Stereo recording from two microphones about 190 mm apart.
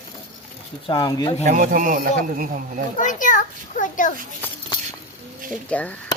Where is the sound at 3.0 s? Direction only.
45° left (ahead or behind).